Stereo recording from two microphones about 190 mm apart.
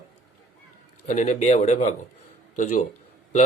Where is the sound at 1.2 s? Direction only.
40° left (ahead or behind).